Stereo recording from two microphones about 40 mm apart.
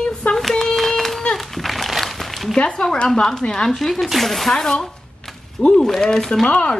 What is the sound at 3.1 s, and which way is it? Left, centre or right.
Speech, centre.